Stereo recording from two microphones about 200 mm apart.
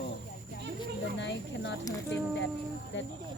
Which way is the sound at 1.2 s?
65° left (ahead or behind).